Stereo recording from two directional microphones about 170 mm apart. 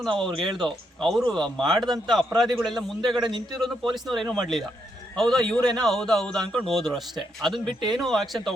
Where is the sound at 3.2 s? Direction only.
25° right (ahead or behind).